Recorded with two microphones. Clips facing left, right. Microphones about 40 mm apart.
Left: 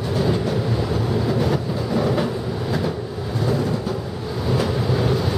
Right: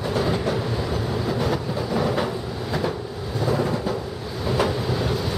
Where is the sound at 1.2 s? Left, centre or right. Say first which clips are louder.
Left 3 dB; centre.